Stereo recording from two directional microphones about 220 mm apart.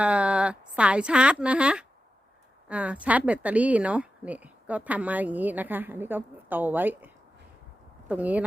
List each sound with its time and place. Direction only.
0.0 s a woman's voice: 5° right (ahead or behind)